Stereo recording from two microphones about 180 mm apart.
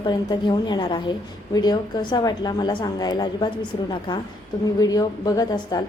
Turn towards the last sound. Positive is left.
turn(degrees=20)  # may be behind; listen again after turning